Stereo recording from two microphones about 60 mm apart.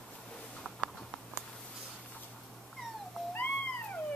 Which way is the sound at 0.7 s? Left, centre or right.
Centre.